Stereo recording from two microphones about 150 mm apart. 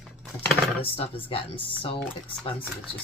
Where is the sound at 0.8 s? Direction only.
40° left (ahead or behind).